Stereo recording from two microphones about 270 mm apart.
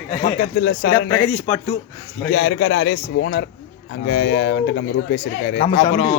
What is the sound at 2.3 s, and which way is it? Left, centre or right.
Speech, left.